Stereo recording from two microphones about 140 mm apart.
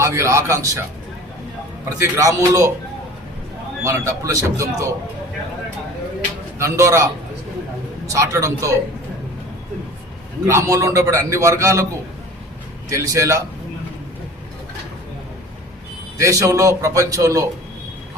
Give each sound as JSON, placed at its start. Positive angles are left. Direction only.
{"t": 0.0, "sound": "a man's voice", "side_deg": -20}
{"t": 1.8, "sound": "a man's voice", "side_deg": -20}
{"t": 3.8, "sound": "a man's voice", "side_deg": -20}
{"t": 6.6, "sound": "a man's voice", "side_deg": -20}
{"t": 10.4, "sound": "a man's voice", "side_deg": -20}
{"t": 12.9, "sound": "a man's voice", "side_deg": -20}
{"t": 16.1, "sound": "a man's voice", "side_deg": -20}